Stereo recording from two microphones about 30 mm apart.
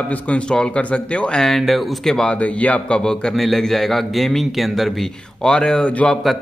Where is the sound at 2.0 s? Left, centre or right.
Centre.